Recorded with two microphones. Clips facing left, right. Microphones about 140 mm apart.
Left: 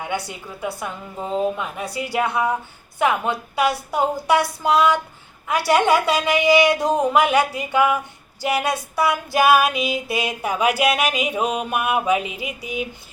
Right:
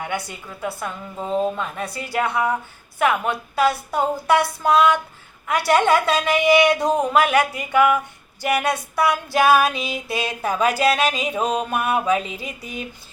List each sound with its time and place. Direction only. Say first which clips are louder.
0.3 s mantra: left 1 dB; 10° left (ahead or behind)